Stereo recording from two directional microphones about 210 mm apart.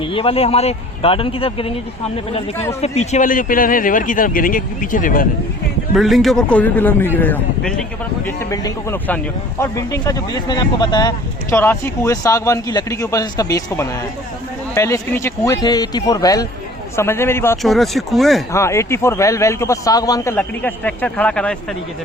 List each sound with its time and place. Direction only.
0.0 s speech: 25° left (ahead or behind)
2.8 s speech: 30° left (ahead or behind)
6.0 s a man's voice: centre (ahead or behind)
8.4 s a man's voice: 15° left (ahead or behind)
17.6 s a man's voice: centre (ahead or behind)
18.5 s a man's voice: 15° left (ahead or behind)